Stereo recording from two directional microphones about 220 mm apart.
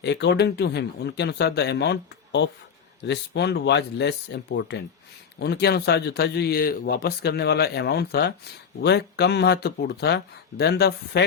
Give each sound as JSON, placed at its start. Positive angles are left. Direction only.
{"t": 0.0, "sound": "speech", "side_deg": 50}